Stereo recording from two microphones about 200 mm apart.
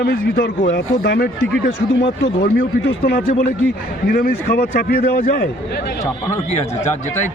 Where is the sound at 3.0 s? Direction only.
45° left (ahead or behind).